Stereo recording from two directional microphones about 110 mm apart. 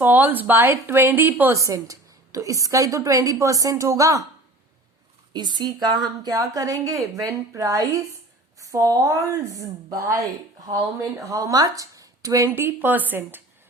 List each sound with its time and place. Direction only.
0.0 s a woman's voice: 15° right (ahead or behind)
5.3 s a woman's voice: 45° right (ahead or behind); by 13.4 s 15° right (ahead or behind)